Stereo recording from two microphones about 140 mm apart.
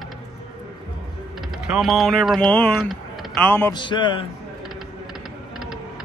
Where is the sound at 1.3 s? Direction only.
5° right (ahead or behind).